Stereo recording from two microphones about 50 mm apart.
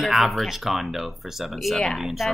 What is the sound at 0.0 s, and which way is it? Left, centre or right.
Speech, centre.